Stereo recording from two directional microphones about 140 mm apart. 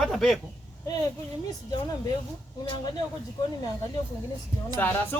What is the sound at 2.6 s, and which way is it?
Speech, 35° left (ahead or behind).